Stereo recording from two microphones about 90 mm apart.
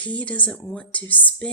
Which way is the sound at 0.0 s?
15° left (ahead or behind).